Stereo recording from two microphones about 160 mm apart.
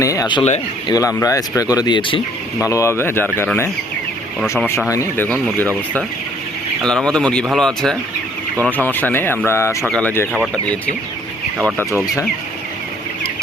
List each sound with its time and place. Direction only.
0.0 s speech: 20° left (ahead or behind)
2.6 s speech: 20° left (ahead or behind)
6.8 s speech: 5° left (ahead or behind)